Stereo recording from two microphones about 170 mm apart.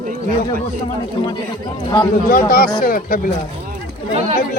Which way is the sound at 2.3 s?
55° left (ahead or behind).